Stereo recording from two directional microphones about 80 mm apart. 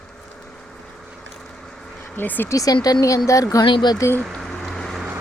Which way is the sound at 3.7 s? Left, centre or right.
Left.